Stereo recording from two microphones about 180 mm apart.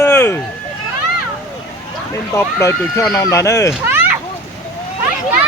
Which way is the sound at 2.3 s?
15° left (ahead or behind).